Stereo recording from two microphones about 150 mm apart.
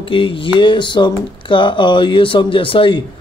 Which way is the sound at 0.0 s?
35° left (ahead or behind).